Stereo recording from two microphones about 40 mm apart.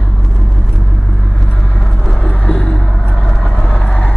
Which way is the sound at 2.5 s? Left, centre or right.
Centre.